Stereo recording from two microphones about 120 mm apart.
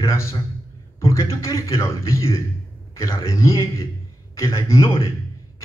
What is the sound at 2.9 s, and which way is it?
Speech, 25° left (ahead or behind).